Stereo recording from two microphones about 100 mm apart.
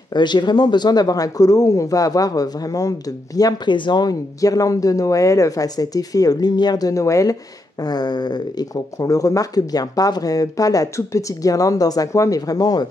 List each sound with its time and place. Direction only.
0.1 s speech: 50° left (ahead or behind); by 7.3 s 35° left (ahead or behind)
7.8 s a sound: 45° left (ahead or behind)
8.9 s speech: 35° left (ahead or behind)